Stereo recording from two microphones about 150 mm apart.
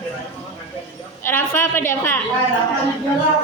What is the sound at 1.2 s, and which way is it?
Speech, 15° left (ahead or behind).